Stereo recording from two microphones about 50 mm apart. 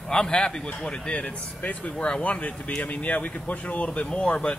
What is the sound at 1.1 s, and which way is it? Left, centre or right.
Speech, left.